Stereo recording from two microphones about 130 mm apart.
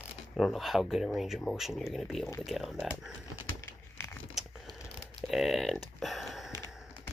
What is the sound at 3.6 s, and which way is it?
Crumpling, 20° left (ahead or behind).